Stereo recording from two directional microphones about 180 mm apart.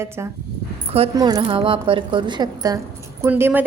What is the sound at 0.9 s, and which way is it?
A woman's voice, 30° right (ahead or behind).